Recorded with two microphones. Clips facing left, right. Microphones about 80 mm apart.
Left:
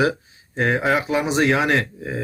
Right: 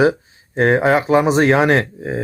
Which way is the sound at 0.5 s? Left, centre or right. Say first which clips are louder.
Right 6 dB; right.